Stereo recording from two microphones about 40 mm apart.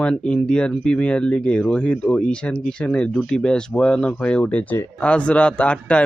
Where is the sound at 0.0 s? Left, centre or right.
Left.